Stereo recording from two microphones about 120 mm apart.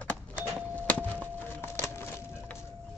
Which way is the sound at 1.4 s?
15° left (ahead or behind).